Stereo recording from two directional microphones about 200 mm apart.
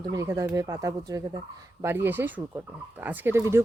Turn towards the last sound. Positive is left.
turn(degrees=-10)  # may be behind; listen again after turning